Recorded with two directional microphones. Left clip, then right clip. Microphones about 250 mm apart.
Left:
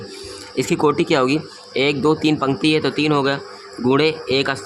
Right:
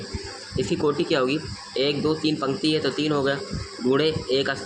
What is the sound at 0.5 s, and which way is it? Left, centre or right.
Speech, left.